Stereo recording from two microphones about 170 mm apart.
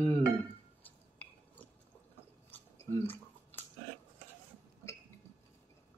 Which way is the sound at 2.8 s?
15° left (ahead or behind).